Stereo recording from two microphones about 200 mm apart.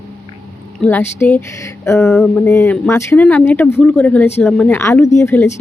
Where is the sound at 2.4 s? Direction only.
10° left (ahead or behind).